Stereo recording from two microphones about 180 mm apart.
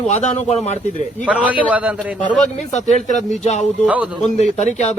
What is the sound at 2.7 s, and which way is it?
Speech, 40° left (ahead or behind).